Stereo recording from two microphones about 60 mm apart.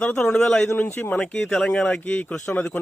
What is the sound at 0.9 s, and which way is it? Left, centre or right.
Speech, left.